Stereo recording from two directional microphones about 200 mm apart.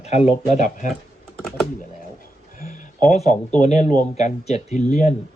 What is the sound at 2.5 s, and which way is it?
A man's voice, 45° left (ahead or behind).